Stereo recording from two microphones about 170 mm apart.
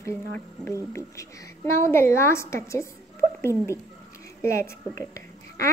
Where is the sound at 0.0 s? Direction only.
15° left (ahead or behind).